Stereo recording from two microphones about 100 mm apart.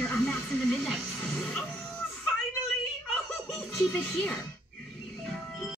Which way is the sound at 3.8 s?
15° left (ahead or behind).